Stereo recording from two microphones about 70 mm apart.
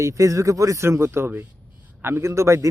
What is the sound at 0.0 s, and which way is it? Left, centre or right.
Speech, right.